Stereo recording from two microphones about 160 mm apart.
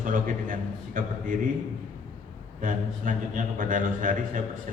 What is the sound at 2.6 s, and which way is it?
A man's voice, 55° right (ahead or behind).